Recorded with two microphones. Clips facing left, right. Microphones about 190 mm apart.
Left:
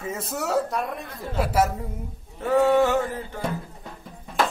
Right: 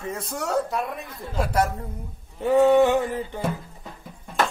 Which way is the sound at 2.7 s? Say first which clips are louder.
Right 2 dB; 15° right (ahead or behind).